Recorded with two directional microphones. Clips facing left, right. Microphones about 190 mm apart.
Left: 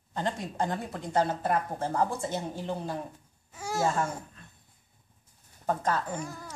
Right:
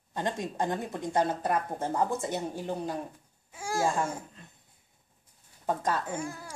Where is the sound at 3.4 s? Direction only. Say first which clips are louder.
Even; 10° right (ahead or behind).